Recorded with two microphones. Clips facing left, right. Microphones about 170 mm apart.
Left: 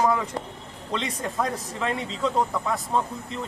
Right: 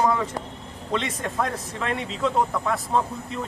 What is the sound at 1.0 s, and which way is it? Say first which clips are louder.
Speech: right 1 dB; centre (ahead or behind).